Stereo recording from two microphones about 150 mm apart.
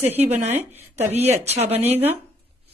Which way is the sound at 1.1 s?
45° right (ahead or behind).